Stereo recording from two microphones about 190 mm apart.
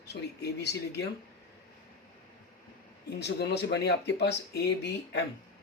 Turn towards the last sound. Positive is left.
turn(degrees=65)  # may be behind; listen again after turning